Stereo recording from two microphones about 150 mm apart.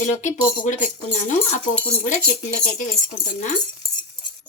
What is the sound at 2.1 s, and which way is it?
Speech, 55° left (ahead or behind).